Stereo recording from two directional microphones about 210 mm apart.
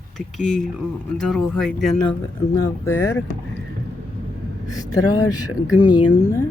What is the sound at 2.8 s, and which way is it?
Speech, 10° left (ahead or behind).